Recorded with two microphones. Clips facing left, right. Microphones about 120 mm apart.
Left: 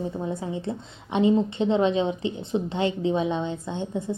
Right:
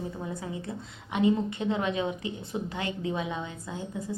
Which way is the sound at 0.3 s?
25° left (ahead or behind).